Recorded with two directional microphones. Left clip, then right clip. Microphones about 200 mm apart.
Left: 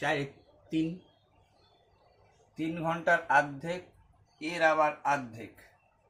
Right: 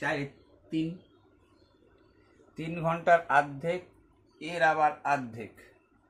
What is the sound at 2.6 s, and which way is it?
Speech, 35° right (ahead or behind).